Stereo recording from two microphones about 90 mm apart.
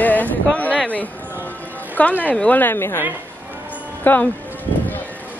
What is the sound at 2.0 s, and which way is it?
Speech, 15° left (ahead or behind).